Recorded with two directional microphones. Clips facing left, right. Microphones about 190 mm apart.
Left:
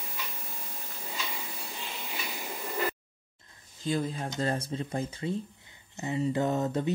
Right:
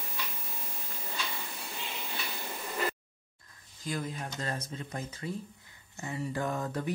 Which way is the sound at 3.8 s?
30° left (ahead or behind).